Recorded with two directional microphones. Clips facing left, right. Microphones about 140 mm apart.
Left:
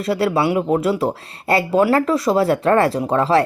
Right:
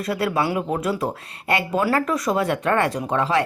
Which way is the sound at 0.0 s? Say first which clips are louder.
Left 4 dB; 25° left (ahead or behind).